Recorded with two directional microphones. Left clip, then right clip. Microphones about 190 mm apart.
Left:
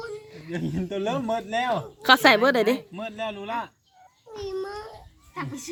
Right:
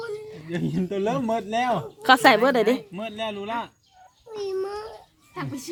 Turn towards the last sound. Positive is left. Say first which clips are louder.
# right 1 dB
turn(degrees=0)  # may be behind; listen again after turning